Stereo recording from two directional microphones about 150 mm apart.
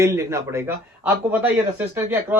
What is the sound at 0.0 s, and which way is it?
Speech, 20° right (ahead or behind).